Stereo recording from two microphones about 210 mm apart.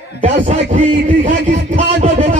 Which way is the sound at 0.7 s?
40° right (ahead or behind).